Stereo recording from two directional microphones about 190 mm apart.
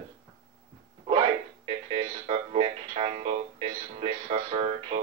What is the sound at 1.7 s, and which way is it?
Music, 30° right (ahead or behind).